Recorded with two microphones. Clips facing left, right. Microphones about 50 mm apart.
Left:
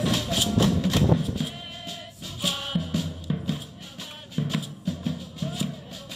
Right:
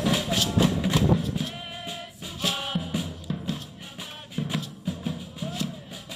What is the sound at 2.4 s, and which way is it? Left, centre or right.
Music, centre.